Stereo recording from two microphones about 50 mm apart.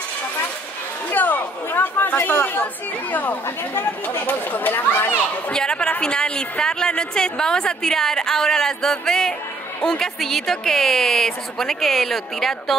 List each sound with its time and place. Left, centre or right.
1.1 s speech: left
5.5 s a woman's voice: centre